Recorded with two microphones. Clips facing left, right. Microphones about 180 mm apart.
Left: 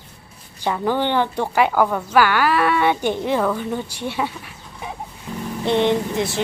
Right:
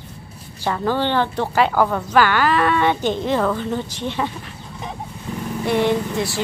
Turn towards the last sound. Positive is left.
turn(degrees=20)  # may be behind; listen again after turning